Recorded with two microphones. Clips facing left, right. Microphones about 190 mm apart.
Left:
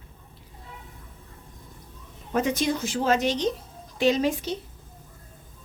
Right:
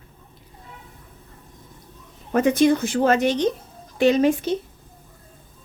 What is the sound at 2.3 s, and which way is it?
Speech, 55° right (ahead or behind).